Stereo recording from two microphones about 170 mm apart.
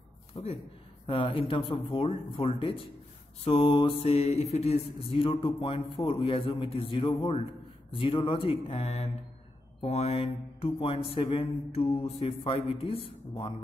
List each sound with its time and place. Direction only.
0.3 s a man's voice: 35° left (ahead or behind)
3.4 s mantra: 30° left (ahead or behind)